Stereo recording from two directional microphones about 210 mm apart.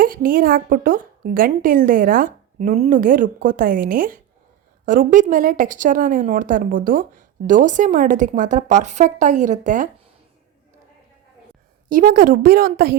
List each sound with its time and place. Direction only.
0.0 s a woman's voice: 40° right (ahead or behind)
11.9 s a woman's voice: 45° right (ahead or behind)